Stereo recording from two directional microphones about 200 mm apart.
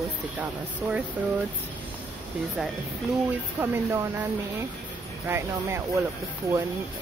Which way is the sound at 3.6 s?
10° right (ahead or behind).